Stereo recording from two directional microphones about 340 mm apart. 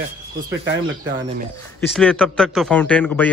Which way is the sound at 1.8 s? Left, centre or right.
Centre.